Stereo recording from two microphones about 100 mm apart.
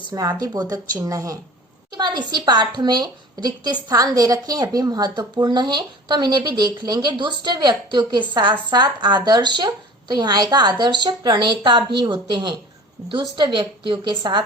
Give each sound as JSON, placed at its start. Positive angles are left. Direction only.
{"t": 0.1, "sound": "speech", "side_deg": -40}
{"t": 2.0, "sound": "a woman's voice", "side_deg": -45}